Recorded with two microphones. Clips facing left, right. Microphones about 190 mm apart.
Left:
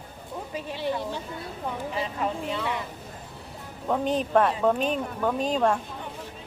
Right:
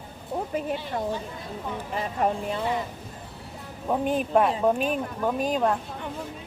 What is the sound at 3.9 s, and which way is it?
Speech, 10° right (ahead or behind).